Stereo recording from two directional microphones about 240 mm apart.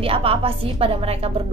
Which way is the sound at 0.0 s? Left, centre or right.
Right.